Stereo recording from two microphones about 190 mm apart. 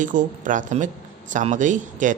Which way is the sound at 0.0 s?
45° right (ahead or behind).